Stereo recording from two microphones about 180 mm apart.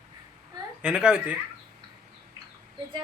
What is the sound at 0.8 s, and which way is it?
Speech, 5° right (ahead or behind).